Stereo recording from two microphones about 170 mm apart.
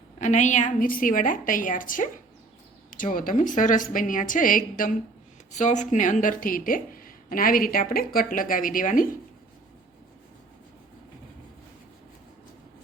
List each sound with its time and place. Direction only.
0.2 s speech: 45° left (ahead or behind)